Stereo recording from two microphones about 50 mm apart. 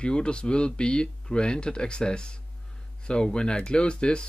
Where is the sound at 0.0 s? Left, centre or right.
Centre.